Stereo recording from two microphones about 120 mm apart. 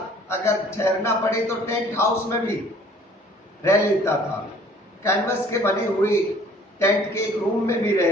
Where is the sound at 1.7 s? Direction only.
20° left (ahead or behind).